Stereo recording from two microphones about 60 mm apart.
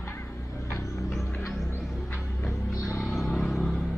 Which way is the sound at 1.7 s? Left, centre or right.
Left.